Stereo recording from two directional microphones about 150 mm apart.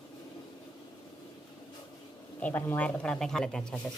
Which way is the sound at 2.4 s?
10° left (ahead or behind).